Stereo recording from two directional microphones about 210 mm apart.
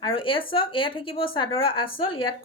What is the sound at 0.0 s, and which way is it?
A woman's voice, 25° left (ahead or behind).